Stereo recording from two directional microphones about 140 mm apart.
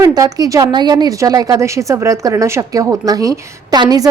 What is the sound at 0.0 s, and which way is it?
A woman's voice, 25° right (ahead or behind).